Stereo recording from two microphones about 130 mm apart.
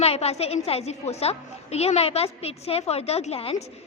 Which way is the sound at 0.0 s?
50° left (ahead or behind).